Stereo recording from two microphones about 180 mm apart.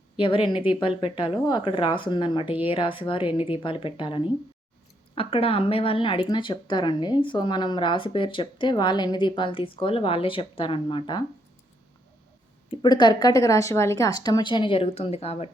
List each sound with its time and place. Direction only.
0.2 s speech: 30° left (ahead or behind)
12.7 s speech: 25° left (ahead or behind)